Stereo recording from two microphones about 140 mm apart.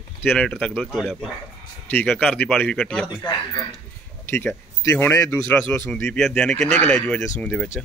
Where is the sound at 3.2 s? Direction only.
25° left (ahead or behind); by 7.7 s 5° left (ahead or behind).